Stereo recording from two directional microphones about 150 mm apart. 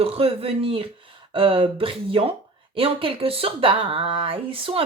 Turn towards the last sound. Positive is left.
turn(degrees=-35)  # may be behind; listen again after turning